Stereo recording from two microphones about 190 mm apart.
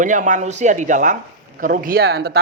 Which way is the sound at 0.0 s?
40° right (ahead or behind).